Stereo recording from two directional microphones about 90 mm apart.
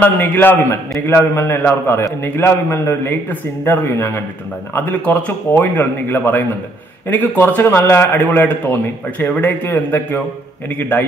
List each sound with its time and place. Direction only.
0.0 s a man's voice: 20° left (ahead or behind)